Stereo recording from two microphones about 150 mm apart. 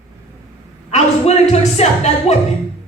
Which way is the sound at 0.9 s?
45° left (ahead or behind).